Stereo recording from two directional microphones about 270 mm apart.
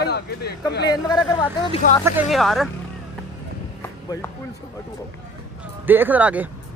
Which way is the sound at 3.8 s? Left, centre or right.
Centre.